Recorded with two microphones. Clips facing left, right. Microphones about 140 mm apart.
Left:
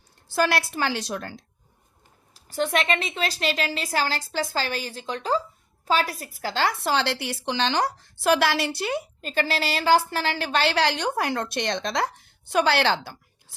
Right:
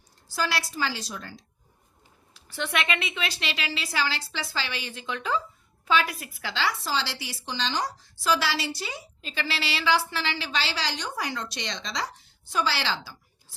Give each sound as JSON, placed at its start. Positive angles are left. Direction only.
{"t": 0.3, "sound": "a woman's voice", "side_deg": 55}
{"t": 2.3, "sound": "a woman's voice", "side_deg": 40}